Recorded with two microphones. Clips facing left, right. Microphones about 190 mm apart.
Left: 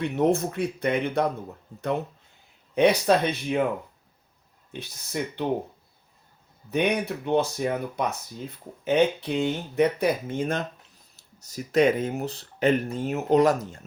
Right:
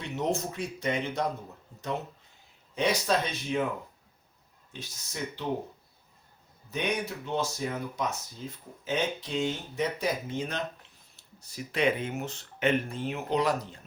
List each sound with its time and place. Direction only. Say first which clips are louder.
0.0 s speech: left 8 dB; 55° left (ahead or behind)
2.7 s speech: left 7 dB; 60° left (ahead or behind)
4.7 s speech: left 9 dB; 60° left (ahead or behind)
6.7 s speech: left 7 dB; 60° left (ahead or behind)